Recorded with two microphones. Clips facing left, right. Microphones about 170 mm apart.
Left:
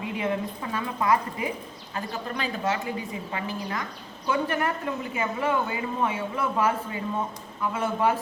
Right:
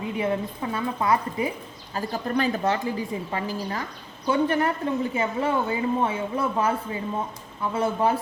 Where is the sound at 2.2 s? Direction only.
45° right (ahead or behind).